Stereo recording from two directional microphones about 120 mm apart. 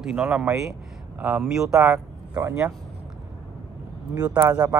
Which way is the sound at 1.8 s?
25° right (ahead or behind).